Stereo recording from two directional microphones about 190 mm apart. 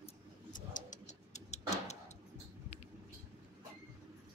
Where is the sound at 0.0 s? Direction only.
45° left (ahead or behind).